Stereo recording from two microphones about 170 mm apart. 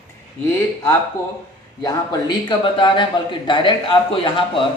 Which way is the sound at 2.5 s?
25° left (ahead or behind).